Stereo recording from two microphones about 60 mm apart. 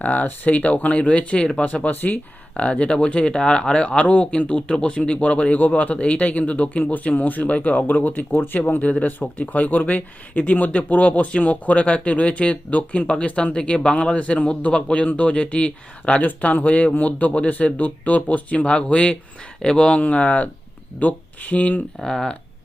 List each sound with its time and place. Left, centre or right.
0.0 s speech: left
22.0 s speech: centre